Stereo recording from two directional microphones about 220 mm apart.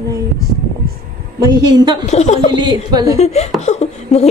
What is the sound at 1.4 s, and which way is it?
Speech, 20° right (ahead or behind).